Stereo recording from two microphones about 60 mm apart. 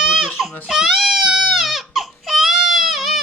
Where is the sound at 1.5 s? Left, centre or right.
Centre.